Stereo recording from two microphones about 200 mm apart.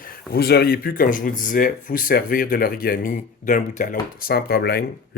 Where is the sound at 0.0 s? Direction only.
50° left (ahead or behind).